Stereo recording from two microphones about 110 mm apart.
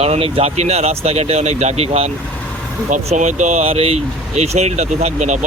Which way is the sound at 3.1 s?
90° right.